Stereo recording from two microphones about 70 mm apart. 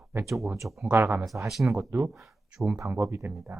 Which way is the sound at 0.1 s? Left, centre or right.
Right.